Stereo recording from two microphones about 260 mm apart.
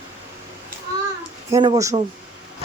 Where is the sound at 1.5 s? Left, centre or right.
Centre.